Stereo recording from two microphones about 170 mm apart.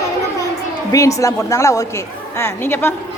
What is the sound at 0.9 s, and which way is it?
A woman's voice, 20° left (ahead or behind).